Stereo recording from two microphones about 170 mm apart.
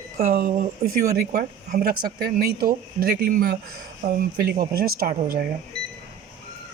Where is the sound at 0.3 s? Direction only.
55° right (ahead or behind).